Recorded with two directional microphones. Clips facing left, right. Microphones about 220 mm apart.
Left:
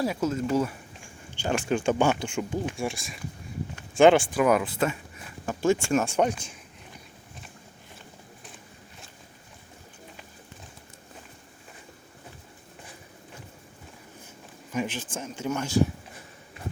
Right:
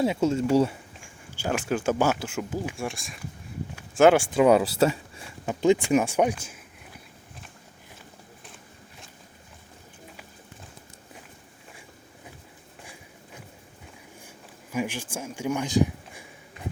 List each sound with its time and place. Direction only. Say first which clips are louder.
0.0 s speech: right 3 dB; 25° right (ahead or behind)
1.4 s speech: left 1 dB; 5° right (ahead or behind)
3.8 s a sound: even; 5° right (ahead or behind)
4.3 s speech: right 4 dB; 25° right (ahead or behind)
5.5 s speech: right 3 dB; 15° right (ahead or behind)
14.7 s speech: right 1 dB; 10° right (ahead or behind)